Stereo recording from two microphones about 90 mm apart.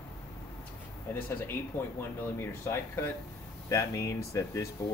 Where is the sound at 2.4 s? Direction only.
25° left (ahead or behind).